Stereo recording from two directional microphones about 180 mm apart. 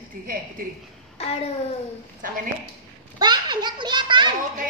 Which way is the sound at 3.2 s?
25° right (ahead or behind).